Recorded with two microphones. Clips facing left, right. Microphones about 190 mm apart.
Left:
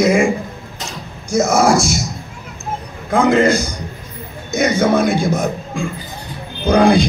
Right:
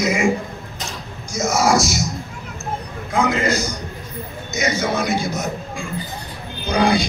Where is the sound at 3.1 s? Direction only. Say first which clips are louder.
Left 7 dB; 55° left (ahead or behind).